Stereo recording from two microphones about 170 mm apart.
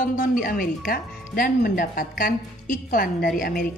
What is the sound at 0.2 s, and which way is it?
A woman's voice, 55° left (ahead or behind).